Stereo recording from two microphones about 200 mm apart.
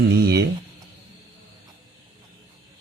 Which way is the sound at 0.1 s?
55° right (ahead or behind).